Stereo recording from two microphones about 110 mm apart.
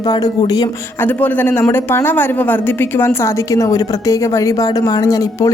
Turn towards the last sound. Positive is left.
turn(degrees=30)  # may be behind; listen again after turning